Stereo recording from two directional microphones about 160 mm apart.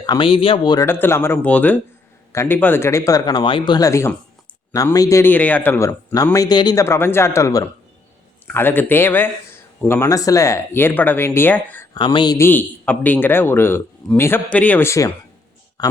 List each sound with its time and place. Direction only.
0.0 s speech: 30° left (ahead or behind)
0.9 s speech: 15° left (ahead or behind)
11.9 s speech: 30° left (ahead or behind)
12.4 s speech: 10° left (ahead or behind)